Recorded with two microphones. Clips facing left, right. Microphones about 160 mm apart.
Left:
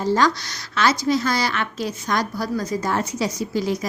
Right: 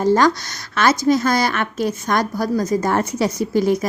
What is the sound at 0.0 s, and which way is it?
A woman's voice, 50° right (ahead or behind).